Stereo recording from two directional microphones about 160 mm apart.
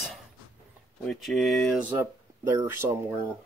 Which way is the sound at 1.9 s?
15° right (ahead or behind).